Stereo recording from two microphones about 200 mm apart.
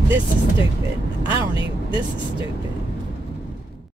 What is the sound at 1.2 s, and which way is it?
Speech, 25° left (ahead or behind).